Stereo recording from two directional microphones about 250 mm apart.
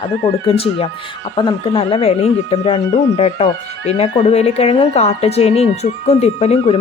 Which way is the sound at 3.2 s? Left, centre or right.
Left.